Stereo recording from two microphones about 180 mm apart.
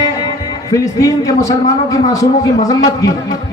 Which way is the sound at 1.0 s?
20° left (ahead or behind).